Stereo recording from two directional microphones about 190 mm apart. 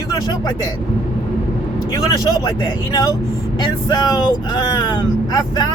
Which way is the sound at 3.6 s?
20° left (ahead or behind).